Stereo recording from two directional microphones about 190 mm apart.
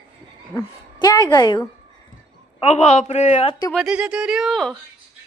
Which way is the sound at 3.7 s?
Centre (ahead or behind).